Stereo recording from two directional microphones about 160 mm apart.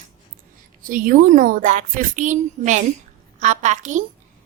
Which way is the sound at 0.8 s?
60° right (ahead or behind).